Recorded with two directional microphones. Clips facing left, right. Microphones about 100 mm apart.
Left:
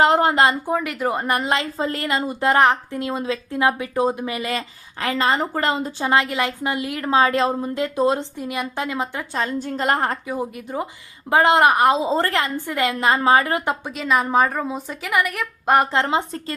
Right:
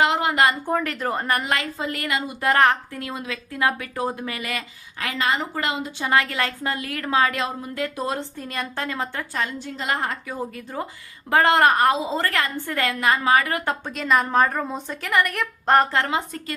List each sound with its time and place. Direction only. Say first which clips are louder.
0.0 s speech: left 4 dB; 40° left (ahead or behind)
0.6 s a woman's voice: left 2 dB; 10° left (ahead or behind); by 6.1 s 40° left (ahead or behind)
6.1 s a woman's voice: left 2 dB; 20° left (ahead or behind)
9.4 s a woman's voice: left 7 dB; 40° left (ahead or behind)
10.2 s a woman's voice: left 4 dB; 15° left (ahead or behind)
11.9 s a woman's voice: left 4 dB; 30° left (ahead or behind)
13.9 s a woman's voice: left 1 dB; centre (ahead or behind); by 16.6 s 30° left (ahead or behind)